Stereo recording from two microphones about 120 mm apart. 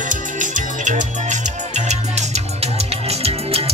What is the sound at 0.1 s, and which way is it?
Music, 90° right.